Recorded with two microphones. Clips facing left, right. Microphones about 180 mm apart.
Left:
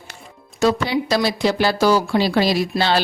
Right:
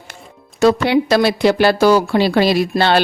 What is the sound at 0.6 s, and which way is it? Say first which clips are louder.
Speech: right 5 dB; 60° right (ahead or behind).